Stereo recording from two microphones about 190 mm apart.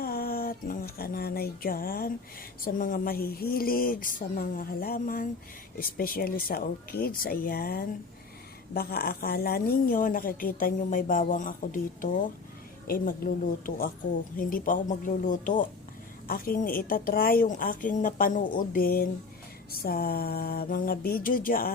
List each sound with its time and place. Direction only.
0.0 s a woman's voice: 50° left (ahead or behind)